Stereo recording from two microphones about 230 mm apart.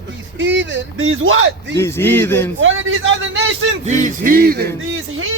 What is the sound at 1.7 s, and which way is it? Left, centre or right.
Speech, centre.